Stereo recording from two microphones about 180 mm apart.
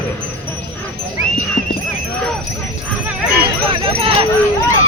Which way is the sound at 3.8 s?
30° right (ahead or behind).